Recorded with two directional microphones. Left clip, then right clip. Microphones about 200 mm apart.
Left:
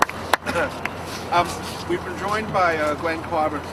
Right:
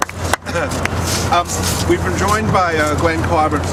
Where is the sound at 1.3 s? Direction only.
40° right (ahead or behind).